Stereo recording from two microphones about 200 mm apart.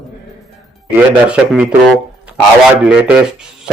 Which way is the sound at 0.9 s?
5° right (ahead or behind).